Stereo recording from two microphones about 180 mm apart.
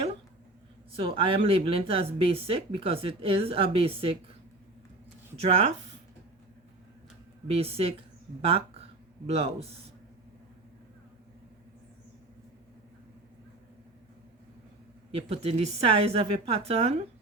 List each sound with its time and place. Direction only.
0.9 s speech: 30° right (ahead or behind)
5.4 s speech: 35° right (ahead or behind)
7.4 s speech: 35° right (ahead or behind)
15.1 s speech: 35° right (ahead or behind)